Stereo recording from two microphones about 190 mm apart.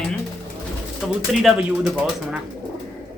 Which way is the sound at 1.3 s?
Centre (ahead or behind).